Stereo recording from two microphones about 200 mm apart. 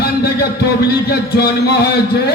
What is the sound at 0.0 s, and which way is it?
A man's voice, 55° left (ahead or behind).